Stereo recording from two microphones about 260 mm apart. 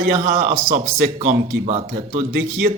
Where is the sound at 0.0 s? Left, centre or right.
Right.